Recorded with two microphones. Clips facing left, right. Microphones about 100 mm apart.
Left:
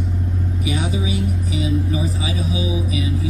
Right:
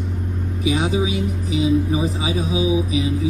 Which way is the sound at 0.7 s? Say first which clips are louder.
Right 5 dB; 30° right (ahead or behind).